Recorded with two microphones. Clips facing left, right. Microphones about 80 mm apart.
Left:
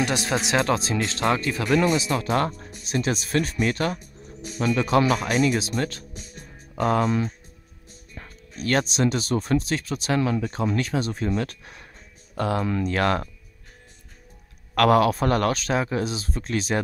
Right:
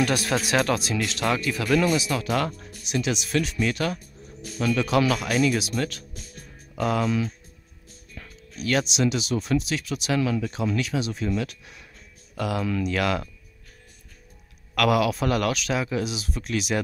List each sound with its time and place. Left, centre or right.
0.0 s speech: left
14.8 s speech: left